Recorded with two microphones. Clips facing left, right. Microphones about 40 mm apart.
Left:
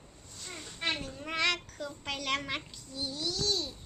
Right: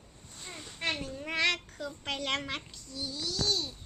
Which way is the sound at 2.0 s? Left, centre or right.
Right.